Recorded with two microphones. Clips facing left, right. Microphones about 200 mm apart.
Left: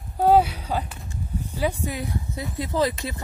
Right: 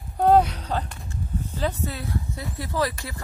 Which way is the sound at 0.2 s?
5° left (ahead or behind).